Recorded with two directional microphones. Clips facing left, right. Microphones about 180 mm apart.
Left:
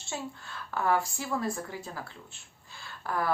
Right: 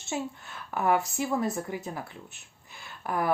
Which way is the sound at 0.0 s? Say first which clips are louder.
Right 5 dB; 20° right (ahead or behind).